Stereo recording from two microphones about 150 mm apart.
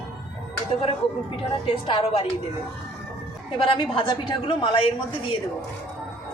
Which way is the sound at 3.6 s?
35° left (ahead or behind).